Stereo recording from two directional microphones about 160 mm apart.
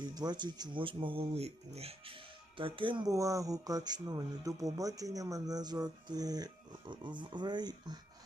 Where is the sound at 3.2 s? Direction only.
20° right (ahead or behind).